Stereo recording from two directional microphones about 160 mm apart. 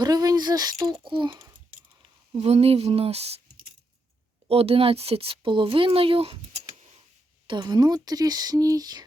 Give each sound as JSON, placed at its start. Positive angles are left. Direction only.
{"t": 0.0, "sound": "speech", "side_deg": -25}
{"t": 2.3, "sound": "speech", "side_deg": -40}
{"t": 4.4, "sound": "speech", "side_deg": -35}
{"t": 7.4, "sound": "speech", "side_deg": -30}